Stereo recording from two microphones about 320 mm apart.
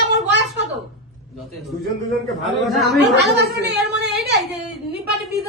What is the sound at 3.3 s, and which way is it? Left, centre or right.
A woman's voice, right.